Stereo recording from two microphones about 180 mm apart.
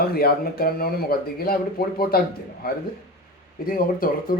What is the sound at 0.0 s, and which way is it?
A man's voice, 60° left (ahead or behind).